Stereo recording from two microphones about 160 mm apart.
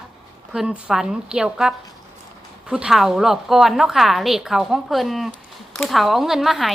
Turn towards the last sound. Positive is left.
turn(degrees=0)  # may be behind; listen again after turning